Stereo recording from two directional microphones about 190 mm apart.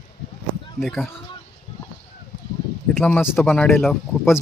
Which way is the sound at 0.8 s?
Centre (ahead or behind).